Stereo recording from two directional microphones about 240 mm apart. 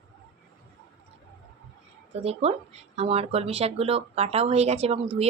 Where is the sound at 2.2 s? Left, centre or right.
Right.